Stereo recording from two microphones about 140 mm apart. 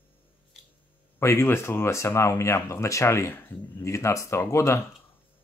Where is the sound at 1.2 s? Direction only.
20° left (ahead or behind).